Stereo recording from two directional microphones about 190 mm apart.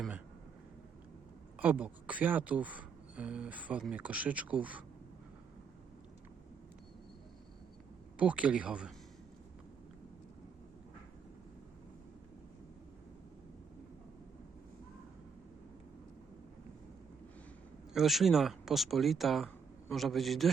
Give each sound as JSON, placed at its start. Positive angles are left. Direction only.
{"t": 1.5, "sound": "speech", "side_deg": -10}
{"t": 8.2, "sound": "speech", "side_deg": -5}
{"t": 17.9, "sound": "speech", "side_deg": 0}